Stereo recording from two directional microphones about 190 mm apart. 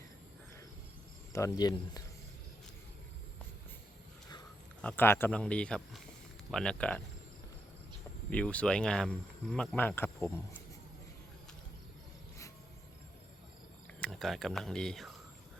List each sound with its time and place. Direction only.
1.3 s speech: 15° left (ahead or behind)
4.8 s speech: 10° left (ahead or behind)
8.3 s speech: 5° left (ahead or behind)
14.0 s speech: centre (ahead or behind)